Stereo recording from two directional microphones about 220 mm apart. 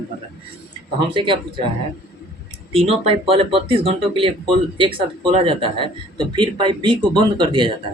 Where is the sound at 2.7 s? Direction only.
30° right (ahead or behind).